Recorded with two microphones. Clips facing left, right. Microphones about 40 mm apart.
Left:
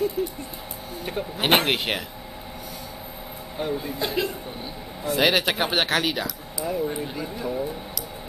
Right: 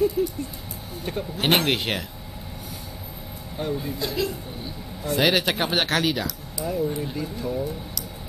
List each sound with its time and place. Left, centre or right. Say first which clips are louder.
0.2 s a sound: right 3 dB; centre
1.0 s speech: right 1 dB; centre
3.5 s speech: even; centre
4.0 s speech: left 1 dB; left
5.0 s speech: even; centre